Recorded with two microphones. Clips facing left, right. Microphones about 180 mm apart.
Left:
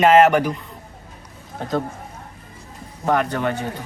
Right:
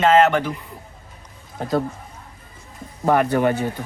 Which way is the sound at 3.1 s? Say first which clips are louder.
Right 3 dB; 10° right (ahead or behind).